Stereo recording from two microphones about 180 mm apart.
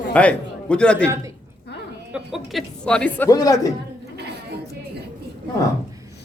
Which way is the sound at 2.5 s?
5° left (ahead or behind).